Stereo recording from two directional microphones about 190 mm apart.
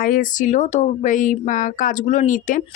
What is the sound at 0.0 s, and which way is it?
Speech, 45° left (ahead or behind).